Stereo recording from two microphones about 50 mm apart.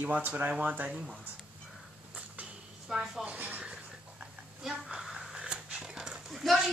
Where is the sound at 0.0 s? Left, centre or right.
Right.